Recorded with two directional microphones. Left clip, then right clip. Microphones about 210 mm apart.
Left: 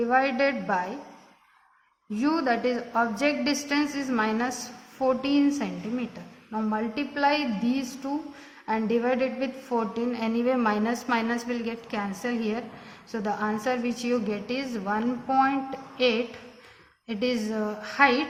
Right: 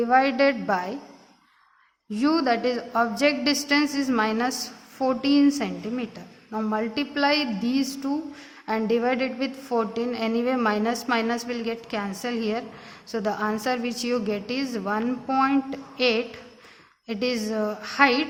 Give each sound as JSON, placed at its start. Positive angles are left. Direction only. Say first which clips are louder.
{"t": 0.0, "sound": "a woman's voice", "louder": "right 3 dB", "side_deg": -50}
{"t": 2.1, "sound": "a woman's voice", "louder": "right 3 dB", "side_deg": -50}